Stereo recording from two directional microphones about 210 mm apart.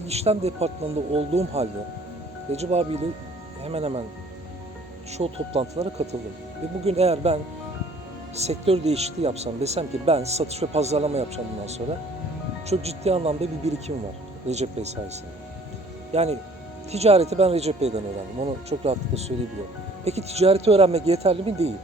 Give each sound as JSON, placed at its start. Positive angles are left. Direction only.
{"t": 0.0, "sound": "speech", "side_deg": -30}
{"t": 5.1, "sound": "speech", "side_deg": -30}
{"t": 8.4, "sound": "speech", "side_deg": -30}